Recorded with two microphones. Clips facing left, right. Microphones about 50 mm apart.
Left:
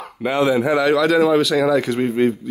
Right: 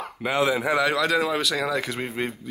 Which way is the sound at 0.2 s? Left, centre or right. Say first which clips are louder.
Left 6 dB; centre.